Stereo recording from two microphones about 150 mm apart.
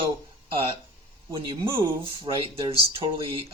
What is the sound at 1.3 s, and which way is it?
Speech, 35° right (ahead or behind).